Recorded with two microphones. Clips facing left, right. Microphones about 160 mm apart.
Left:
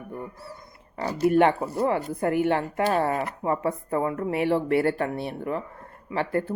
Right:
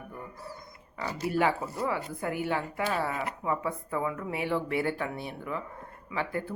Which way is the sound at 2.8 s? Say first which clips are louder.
Left 8 dB; 45° left (ahead or behind).